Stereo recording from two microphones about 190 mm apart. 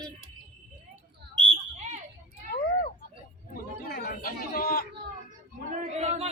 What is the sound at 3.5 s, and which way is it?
Chatter, 55° left (ahead or behind).